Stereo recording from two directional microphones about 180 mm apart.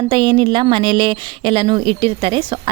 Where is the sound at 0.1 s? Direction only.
25° right (ahead or behind).